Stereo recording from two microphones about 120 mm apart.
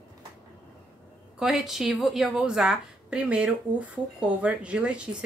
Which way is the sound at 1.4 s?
Centre (ahead or behind).